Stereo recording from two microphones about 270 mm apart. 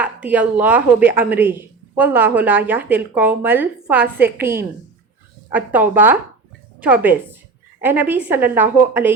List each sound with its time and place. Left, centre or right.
0.0 s speech: centre